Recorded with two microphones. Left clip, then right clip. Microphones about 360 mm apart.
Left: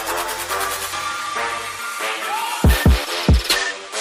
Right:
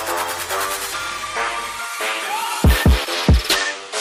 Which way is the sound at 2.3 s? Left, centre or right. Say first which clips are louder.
Even; centre.